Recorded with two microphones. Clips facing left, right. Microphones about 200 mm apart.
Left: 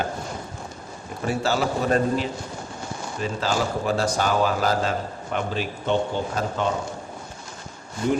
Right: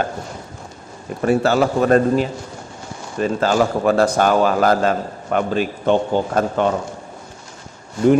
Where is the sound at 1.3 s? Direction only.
55° right (ahead or behind).